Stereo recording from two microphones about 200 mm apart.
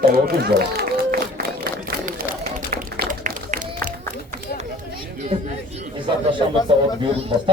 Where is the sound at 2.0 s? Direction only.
45° right (ahead or behind).